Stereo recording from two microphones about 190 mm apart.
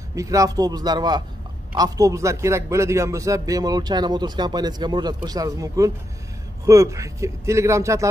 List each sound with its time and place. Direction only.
0.1 s a man's voice: 15° right (ahead or behind)